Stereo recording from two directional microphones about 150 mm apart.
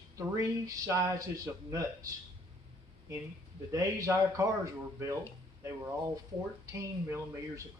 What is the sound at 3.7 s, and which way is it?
Speech, 20° right (ahead or behind).